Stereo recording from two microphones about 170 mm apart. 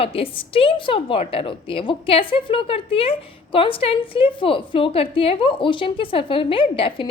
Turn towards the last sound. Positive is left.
turn(degrees=30)  # may be behind; listen again after turning